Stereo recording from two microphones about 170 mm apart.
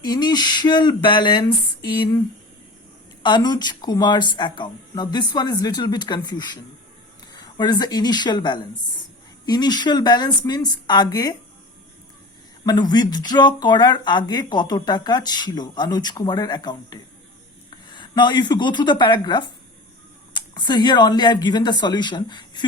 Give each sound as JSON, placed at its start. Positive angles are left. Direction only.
{"t": 0.0, "sound": "speech", "side_deg": 25}
{"t": 3.2, "sound": "speech", "side_deg": 25}
{"t": 12.6, "sound": "speech", "side_deg": 25}